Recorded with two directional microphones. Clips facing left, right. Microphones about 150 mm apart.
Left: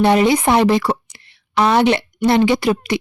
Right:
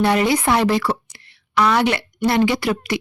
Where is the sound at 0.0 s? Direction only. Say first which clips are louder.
Left 4 dB; 20° left (ahead or behind).